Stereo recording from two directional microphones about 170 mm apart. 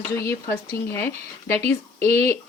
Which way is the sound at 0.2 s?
15° left (ahead or behind).